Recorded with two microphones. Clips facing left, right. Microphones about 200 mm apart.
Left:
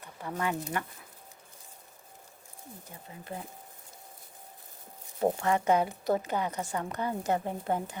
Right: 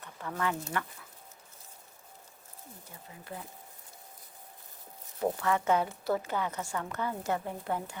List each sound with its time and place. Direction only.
0.0 s speech: 20° left (ahead or behind)
5.2 s a woman's voice: 30° left (ahead or behind)
5.6 s a woman's voice: 15° left (ahead or behind)